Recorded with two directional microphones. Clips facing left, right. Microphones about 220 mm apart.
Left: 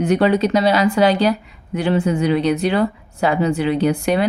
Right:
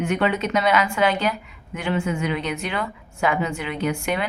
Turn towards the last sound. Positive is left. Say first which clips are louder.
# left 7 dB
turn(degrees=35)  # may be behind; listen again after turning